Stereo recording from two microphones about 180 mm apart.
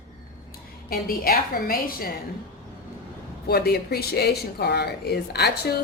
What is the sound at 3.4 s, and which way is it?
Speech, 60° left (ahead or behind).